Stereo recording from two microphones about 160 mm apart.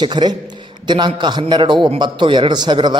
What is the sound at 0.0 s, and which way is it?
A man's voice, 30° right (ahead or behind).